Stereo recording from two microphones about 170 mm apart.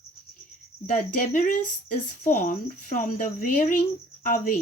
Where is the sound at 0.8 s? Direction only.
50° left (ahead or behind).